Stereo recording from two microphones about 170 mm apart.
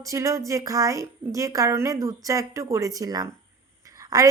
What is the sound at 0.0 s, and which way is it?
A woman's voice, 20° right (ahead or behind).